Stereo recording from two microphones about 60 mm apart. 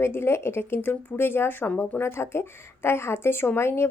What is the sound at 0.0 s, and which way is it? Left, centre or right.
Speech, left.